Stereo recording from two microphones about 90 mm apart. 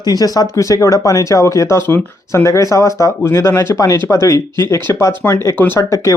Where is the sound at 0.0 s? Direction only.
45° left (ahead or behind); by 5.8 s 25° left (ahead or behind).